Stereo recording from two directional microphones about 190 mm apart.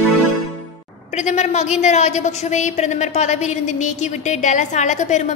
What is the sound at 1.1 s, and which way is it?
A woman's voice, 40° left (ahead or behind).